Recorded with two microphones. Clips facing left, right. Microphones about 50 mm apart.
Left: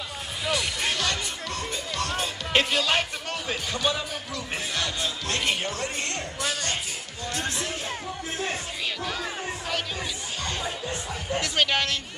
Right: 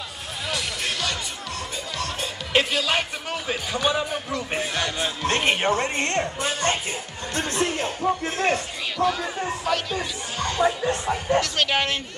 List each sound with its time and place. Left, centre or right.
0.5 s music: centre
5.2 s speech: right
8.9 s speech: centre
10.4 s speech: right
10.9 s speech: right
11.4 s speech: centre
11.7 s speech: centre